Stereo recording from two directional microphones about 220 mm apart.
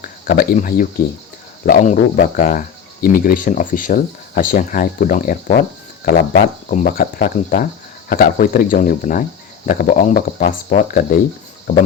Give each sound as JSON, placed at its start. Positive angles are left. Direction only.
{"t": 0.0, "sound": "speech", "side_deg": 40}